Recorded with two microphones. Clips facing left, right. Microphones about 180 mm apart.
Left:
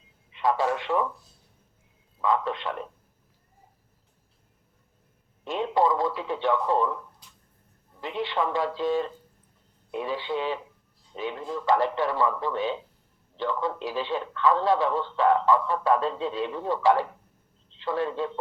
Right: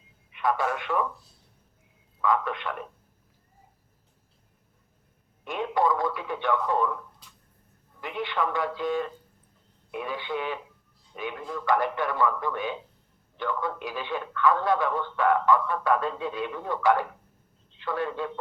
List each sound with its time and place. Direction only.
0.3 s speech: 25° left (ahead or behind)
2.2 s a man's voice: 25° left (ahead or behind)
5.5 s a man's voice: 25° left (ahead or behind)
8.0 s a man's voice: 25° left (ahead or behind)